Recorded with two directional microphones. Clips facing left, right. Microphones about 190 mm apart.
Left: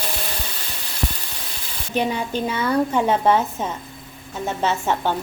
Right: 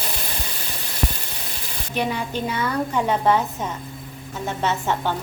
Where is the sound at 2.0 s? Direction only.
20° left (ahead or behind).